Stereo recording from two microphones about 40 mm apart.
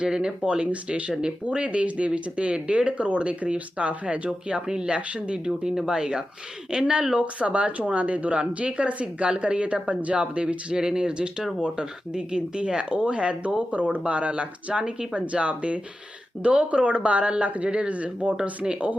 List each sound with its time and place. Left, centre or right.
0.0 s speech: right
4.6 s speech: centre
4.9 s speech: right